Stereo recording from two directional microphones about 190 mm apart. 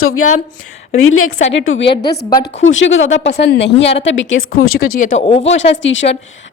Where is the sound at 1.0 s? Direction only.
90° left.